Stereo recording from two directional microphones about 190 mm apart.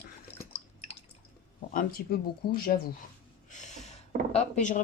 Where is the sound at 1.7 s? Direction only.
55° left (ahead or behind).